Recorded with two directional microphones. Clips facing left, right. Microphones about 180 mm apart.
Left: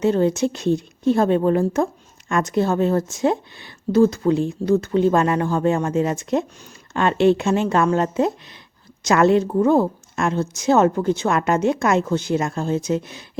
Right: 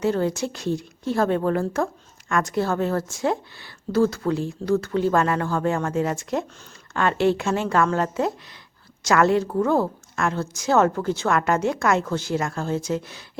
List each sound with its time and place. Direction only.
0.0 s a woman's voice: 20° left (ahead or behind)